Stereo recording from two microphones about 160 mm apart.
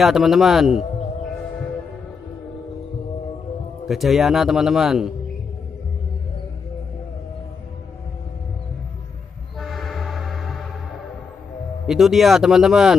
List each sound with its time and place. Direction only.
0.0 s speech: centre (ahead or behind)
3.8 s speech: centre (ahead or behind)
9.6 s train horn: centre (ahead or behind)
11.8 s speech: centre (ahead or behind)